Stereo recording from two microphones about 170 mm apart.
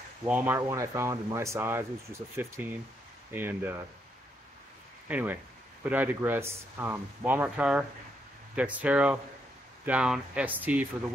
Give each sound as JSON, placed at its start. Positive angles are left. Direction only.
{"t": 0.2, "sound": "speech", "side_deg": -10}
{"t": 5.0, "sound": "speech", "side_deg": -10}